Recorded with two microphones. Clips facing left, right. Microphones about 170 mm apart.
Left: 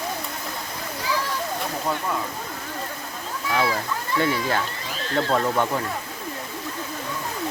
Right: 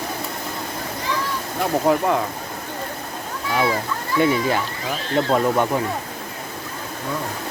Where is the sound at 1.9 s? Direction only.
70° right (ahead or behind).